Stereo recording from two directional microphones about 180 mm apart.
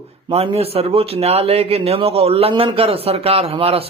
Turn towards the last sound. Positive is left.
turn(degrees=-30)  # may be behind; listen again after turning